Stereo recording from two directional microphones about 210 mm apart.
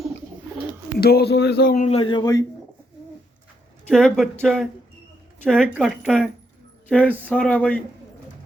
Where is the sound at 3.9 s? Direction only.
Centre (ahead or behind).